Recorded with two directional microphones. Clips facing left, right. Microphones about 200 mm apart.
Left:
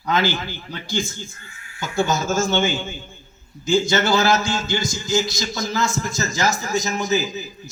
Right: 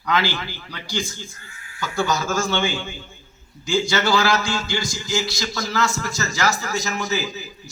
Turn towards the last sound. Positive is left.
turn(degrees=20)  # may be behind; listen again after turning